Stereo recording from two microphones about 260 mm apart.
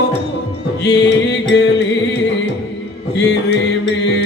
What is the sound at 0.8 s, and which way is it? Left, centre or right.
Music, left.